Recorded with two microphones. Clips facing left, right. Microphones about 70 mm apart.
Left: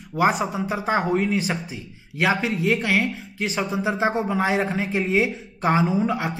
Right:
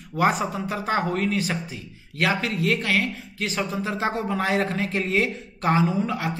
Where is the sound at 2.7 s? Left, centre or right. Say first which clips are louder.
Left 2 dB; centre.